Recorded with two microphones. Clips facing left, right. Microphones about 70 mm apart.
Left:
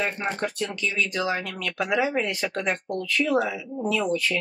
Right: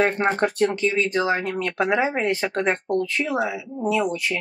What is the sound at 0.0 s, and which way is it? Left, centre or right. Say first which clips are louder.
Speech: right 7 dB; right.